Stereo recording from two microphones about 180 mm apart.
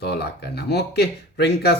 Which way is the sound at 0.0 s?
65° left (ahead or behind).